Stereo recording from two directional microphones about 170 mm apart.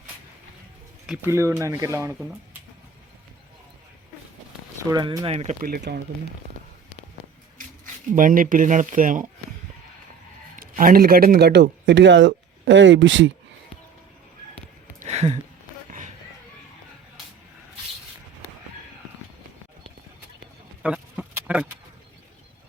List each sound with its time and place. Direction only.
1.0 s speech: 10° right (ahead or behind)
4.8 s speech: 20° right (ahead or behind); by 5.5 s 40° right (ahead or behind)
5.5 s speech: 60° right (ahead or behind)
8.1 s speech: 55° right (ahead or behind)
10.6 s a man's voice: 55° right (ahead or behind); by 13.3 s 90° right
14.9 s a sound: 40° right (ahead or behind)
20.8 s a sound: 5° right (ahead or behind)